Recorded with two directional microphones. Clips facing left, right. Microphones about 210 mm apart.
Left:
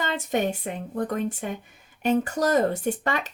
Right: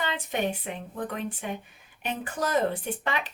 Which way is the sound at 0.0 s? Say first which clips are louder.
Left 4 dB; 45° left (ahead or behind).